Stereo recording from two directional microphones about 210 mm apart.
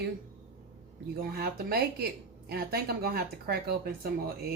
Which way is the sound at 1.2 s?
45° right (ahead or behind).